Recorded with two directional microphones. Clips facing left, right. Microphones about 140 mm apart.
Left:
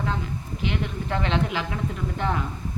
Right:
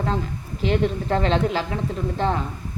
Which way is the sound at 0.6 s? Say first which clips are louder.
Right 8 dB; 35° right (ahead or behind).